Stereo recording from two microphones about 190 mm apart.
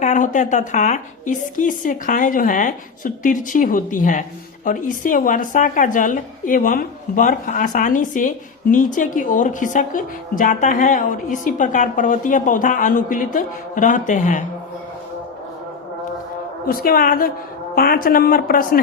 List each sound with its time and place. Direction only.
0.0 s speech: 40° left (ahead or behind)
16.6 s speech: 50° left (ahead or behind)